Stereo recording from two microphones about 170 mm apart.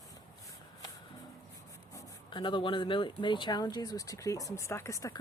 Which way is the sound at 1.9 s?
25° left (ahead or behind).